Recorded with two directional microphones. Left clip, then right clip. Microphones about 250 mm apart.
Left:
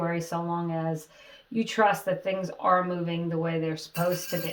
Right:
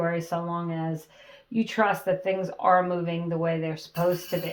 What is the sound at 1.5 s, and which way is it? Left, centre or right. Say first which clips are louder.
Speech: left 1 dB; right.